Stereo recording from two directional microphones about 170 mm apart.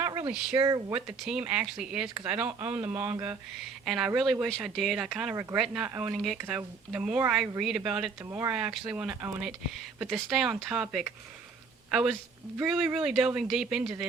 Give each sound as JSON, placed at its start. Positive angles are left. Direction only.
{"t": 0.0, "sound": "a sound", "side_deg": -20}
{"t": 0.5, "sound": "speech", "side_deg": -20}
{"t": 0.9, "sound": "speech", "side_deg": -5}
{"t": 5.3, "sound": "speech", "side_deg": -15}
{"t": 5.5, "sound": "speech", "side_deg": 0}
{"t": 8.3, "sound": "speech", "side_deg": -15}
{"t": 8.5, "sound": "a woman's voice", "side_deg": -5}